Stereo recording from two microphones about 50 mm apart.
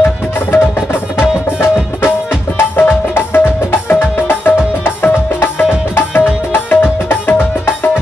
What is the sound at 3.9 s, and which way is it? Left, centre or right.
Music, left.